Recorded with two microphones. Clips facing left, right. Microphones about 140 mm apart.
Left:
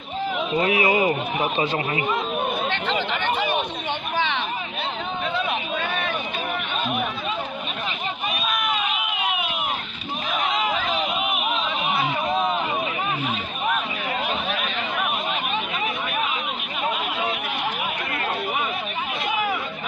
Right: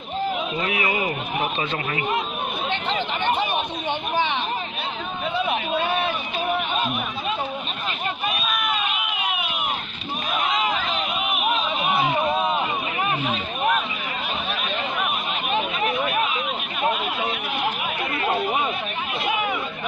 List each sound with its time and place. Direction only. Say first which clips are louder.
0.6 s a man's voice: left 7 dB; 30° left (ahead or behind)
2.6 s chatter: left 1 dB; 15° right (ahead or behind)
9.1 s run: left 1 dB; 25° left (ahead or behind)